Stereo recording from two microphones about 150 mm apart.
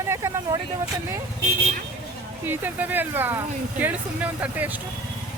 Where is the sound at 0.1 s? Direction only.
20° right (ahead or behind).